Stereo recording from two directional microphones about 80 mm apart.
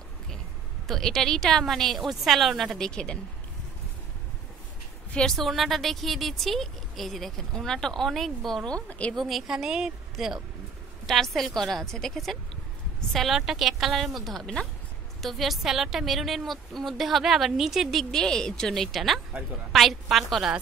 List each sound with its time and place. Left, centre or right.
0.8 s speech: centre
2.9 s a woman's voice: centre
5.1 s speech: centre
8.8 s a woman's voice: centre
9.1 s speech: centre
18.1 s speech: centre